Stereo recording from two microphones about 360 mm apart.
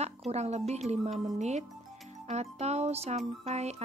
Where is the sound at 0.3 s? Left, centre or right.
Centre.